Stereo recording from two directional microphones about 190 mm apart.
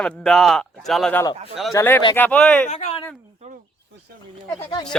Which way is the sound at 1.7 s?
15° left (ahead or behind).